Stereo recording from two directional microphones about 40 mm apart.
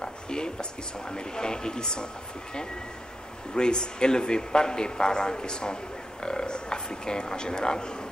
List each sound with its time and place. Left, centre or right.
0.0 s a man's voice: centre
3.5 s a man's voice: left